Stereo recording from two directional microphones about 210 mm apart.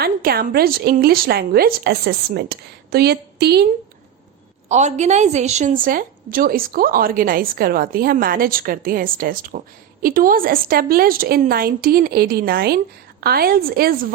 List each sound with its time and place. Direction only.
0.0 s a woman's voice: 45° right (ahead or behind)
4.7 s a woman's voice: 35° right (ahead or behind)